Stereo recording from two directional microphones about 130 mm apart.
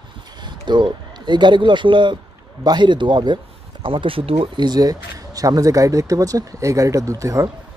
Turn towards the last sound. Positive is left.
turn(degrees=-25)  # may be behind; listen again after turning